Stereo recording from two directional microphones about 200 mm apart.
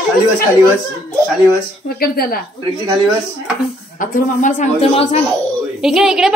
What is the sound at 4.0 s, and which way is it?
A woman's voice, 45° left (ahead or behind).